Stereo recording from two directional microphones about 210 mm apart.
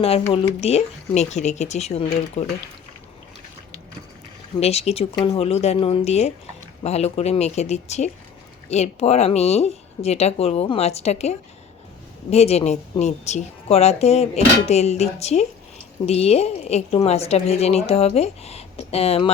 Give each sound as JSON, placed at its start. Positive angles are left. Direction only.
{"t": 0.6, "sound": "a woman's voice", "side_deg": 30}
{"t": 4.6, "sound": "a woman's voice", "side_deg": 30}